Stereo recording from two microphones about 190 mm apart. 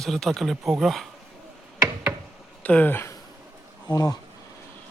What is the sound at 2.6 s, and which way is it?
Speech, 10° left (ahead or behind).